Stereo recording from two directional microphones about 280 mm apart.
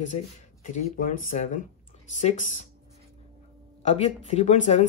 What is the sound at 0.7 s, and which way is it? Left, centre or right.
Speech, left.